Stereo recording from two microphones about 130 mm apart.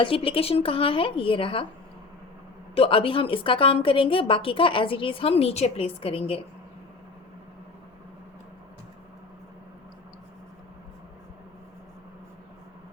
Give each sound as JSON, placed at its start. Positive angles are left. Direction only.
{"t": 0.0, "sound": "a woman's voice", "side_deg": 45}
{"t": 2.7, "sound": "a woman's voice", "side_deg": 45}